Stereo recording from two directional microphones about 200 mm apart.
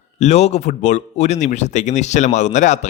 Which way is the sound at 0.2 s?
35° left (ahead or behind).